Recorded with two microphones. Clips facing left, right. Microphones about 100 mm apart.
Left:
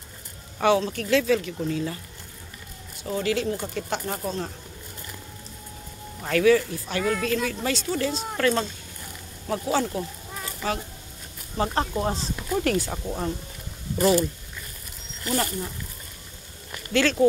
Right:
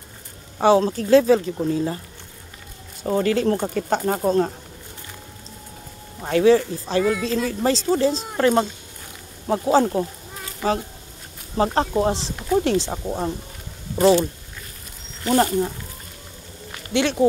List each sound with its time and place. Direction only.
0.6 s speech: 30° right (ahead or behind)
3.0 s speech: 40° right (ahead or behind)
6.2 s speech: 25° right (ahead or behind)
7.1 s speech: 20° right (ahead or behind)
7.4 s speech: 35° right (ahead or behind)
11.5 s speech: 30° right (ahead or behind)
15.2 s speech: 35° right (ahead or behind)
16.9 s speech: 20° right (ahead or behind)